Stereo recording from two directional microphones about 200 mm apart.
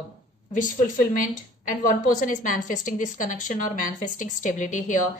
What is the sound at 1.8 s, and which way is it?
A woman's voice, 40° left (ahead or behind).